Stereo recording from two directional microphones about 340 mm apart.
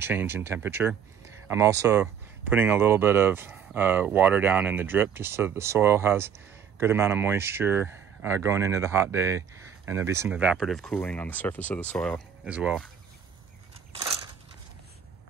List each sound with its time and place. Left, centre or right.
0.0 s speech: centre